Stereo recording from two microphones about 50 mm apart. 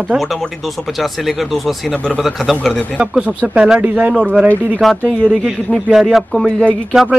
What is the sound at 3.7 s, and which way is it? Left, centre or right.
Speech, right.